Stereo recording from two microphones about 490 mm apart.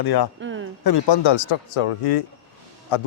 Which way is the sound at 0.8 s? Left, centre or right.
Left.